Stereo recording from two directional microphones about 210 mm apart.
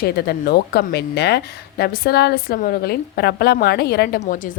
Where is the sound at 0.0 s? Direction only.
50° left (ahead or behind).